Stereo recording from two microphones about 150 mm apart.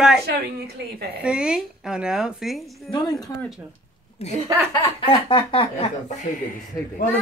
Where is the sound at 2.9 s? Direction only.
30° left (ahead or behind).